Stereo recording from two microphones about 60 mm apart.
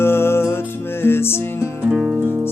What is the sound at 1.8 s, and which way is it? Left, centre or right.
Music, right.